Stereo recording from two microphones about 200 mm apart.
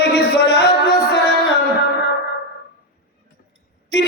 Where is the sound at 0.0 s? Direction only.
55° left (ahead or behind).